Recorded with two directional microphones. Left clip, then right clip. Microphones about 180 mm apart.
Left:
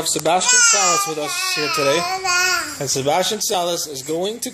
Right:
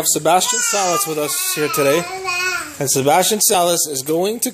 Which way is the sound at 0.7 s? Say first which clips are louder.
Even; 50° right (ahead or behind).